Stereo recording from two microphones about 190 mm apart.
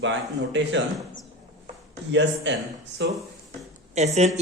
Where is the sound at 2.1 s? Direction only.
70° right (ahead or behind).